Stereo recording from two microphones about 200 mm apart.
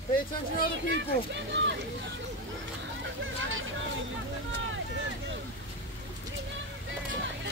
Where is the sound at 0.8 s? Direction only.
65° right (ahead or behind).